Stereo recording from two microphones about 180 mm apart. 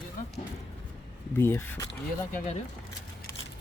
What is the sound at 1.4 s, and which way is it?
Speech, 10° left (ahead or behind).